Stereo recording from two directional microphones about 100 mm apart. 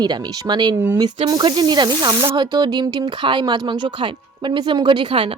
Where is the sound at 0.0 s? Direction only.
45° right (ahead or behind).